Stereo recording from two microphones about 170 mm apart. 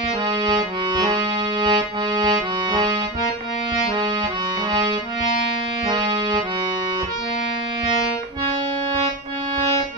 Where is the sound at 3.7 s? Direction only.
30° right (ahead or behind).